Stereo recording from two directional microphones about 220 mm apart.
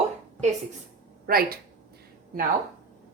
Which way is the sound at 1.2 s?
40° right (ahead or behind).